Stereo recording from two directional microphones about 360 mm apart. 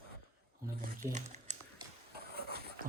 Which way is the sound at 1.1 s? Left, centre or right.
Centre.